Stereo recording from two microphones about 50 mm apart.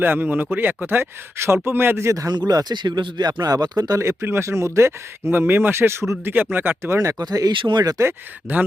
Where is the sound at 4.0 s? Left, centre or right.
Right.